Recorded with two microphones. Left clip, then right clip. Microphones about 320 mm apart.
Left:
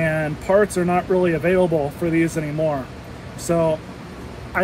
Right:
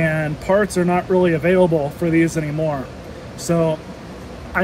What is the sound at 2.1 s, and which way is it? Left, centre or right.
Speech, right.